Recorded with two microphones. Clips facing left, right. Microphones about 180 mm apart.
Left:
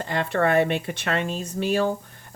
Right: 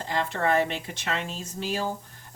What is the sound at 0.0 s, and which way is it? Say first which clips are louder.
Speech: left 4 dB; 60° left (ahead or behind).